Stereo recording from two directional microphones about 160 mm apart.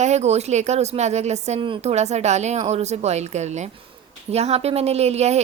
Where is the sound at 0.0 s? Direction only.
45° right (ahead or behind).